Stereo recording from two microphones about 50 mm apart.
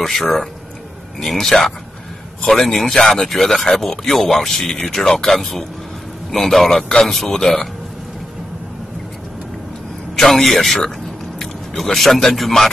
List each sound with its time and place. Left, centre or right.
0.0 s speech: centre
10.1 s a man's voice: centre